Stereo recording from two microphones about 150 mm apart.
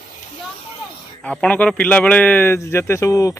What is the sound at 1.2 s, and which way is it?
A man's voice, 10° left (ahead or behind).